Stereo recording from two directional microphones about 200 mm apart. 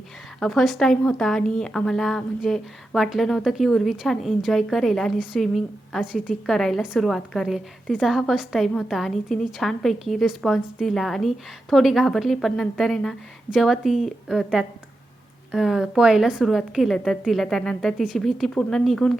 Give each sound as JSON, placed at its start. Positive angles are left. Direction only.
{"t": 0.3, "sound": "a woman's voice", "side_deg": 0}